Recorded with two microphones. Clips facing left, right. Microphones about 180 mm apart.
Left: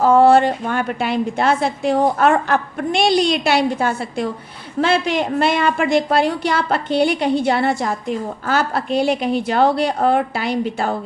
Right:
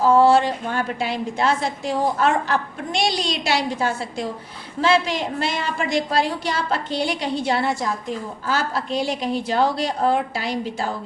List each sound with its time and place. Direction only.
0.0 s a woman's voice: 55° left (ahead or behind)